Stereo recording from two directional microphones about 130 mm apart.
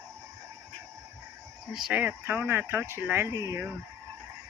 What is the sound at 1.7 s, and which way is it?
Speech, 10° right (ahead or behind).